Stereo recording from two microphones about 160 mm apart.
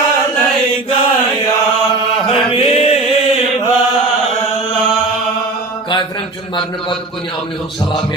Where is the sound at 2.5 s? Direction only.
35° left (ahead or behind).